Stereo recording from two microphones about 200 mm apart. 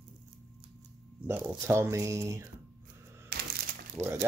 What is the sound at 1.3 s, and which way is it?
Speech, 10° right (ahead or behind).